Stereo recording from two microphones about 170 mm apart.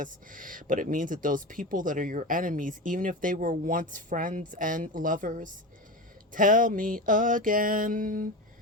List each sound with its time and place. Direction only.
0.0 s speech: 50° right (ahead or behind)